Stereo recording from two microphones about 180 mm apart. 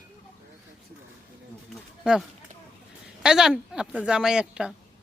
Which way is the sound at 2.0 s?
5° right (ahead or behind).